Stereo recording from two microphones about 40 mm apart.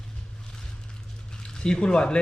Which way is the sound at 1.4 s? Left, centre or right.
Left.